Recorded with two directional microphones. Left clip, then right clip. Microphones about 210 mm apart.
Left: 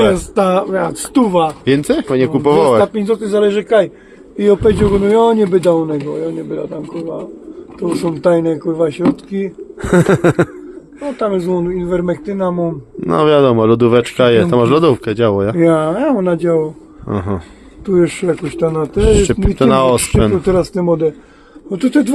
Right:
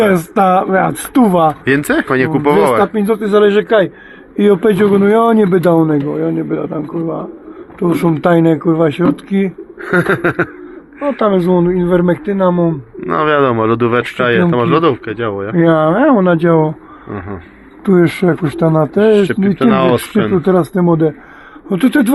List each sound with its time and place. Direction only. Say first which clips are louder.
0.1 s speech: right 2 dB; 35° right (ahead or behind)
1.6 s speech: right 1 dB; 20° left (ahead or behind)
2.8 s speech: right 1 dB; 35° right (ahead or behind)
7.8 s speech: right 4 dB; 30° right (ahead or behind)
9.8 s speech: left 1 dB; 45° left (ahead or behind)
11.2 s speech: right 4 dB; 25° right (ahead or behind)
13.0 s speech: left 2 dB; 35° left (ahead or behind)
15.5 s speech: right 2 dB; 20° right (ahead or behind)
17.1 s speech: left 5 dB; 50° left (ahead or behind)
17.8 s speech: right 2 dB; 35° right (ahead or behind)
19.1 s speech: right 1 dB; 50° left (ahead or behind)
20.5 s speech: right 1 dB; 25° right (ahead or behind)